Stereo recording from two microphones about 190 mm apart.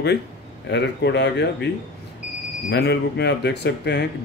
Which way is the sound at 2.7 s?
65° left (ahead or behind).